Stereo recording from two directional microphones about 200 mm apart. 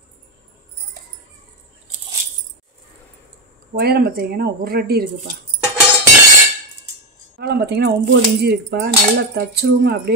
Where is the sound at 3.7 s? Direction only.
50° right (ahead or behind).